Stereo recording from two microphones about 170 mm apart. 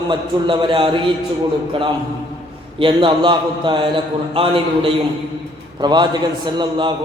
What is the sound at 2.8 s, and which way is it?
A man's voice, 30° right (ahead or behind).